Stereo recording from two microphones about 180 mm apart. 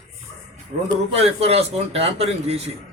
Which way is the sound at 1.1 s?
35° right (ahead or behind).